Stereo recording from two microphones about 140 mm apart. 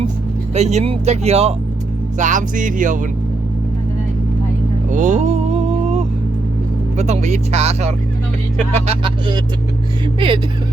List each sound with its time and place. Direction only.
0.5 s speech: 55° right (ahead or behind)
2.1 s music: 65° right (ahead or behind)
4.9 s vehicle: 60° right (ahead or behind)
6.9 s speech: 55° right (ahead or behind)
9.0 s speech: 35° right (ahead or behind)